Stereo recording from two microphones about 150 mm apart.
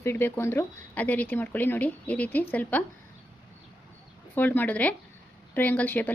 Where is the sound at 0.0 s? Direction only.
15° left (ahead or behind).